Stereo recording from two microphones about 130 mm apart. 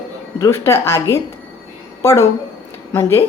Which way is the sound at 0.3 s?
25° left (ahead or behind).